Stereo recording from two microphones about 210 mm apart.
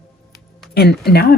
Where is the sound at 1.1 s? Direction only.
50° left (ahead or behind).